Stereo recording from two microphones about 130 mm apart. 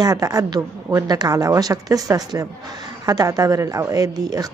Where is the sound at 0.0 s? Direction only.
30° right (ahead or behind).